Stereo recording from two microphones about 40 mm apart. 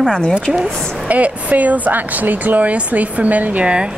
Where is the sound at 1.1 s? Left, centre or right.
Right.